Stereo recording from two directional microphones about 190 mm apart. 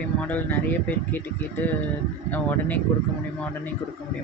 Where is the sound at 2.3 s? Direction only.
10° left (ahead or behind).